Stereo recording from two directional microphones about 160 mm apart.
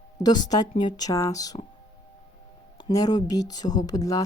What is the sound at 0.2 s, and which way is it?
Speech, 25° left (ahead or behind).